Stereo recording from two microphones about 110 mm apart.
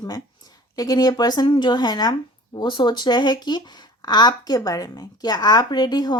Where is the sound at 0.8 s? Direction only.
35° left (ahead or behind).